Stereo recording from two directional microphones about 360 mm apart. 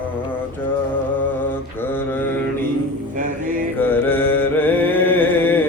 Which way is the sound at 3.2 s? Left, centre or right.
Right.